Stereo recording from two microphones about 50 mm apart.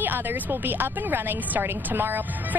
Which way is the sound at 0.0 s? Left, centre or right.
Right.